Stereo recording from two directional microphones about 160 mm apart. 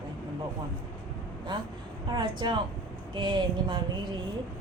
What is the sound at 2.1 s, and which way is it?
A woman's voice, 30° right (ahead or behind).